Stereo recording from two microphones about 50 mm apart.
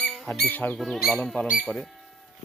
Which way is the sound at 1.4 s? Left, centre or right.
Left.